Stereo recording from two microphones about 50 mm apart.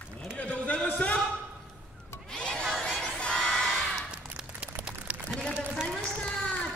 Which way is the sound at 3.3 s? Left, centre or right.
Centre.